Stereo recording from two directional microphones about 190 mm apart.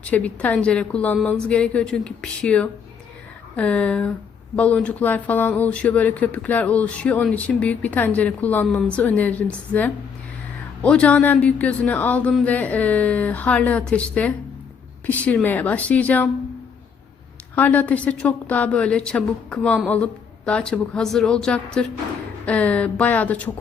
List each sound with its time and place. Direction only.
0.0 s a woman's voice: 5° left (ahead or behind)
17.5 s a woman's voice: 10° left (ahead or behind)